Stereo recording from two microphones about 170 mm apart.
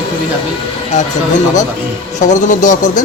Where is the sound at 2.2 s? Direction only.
45° left (ahead or behind).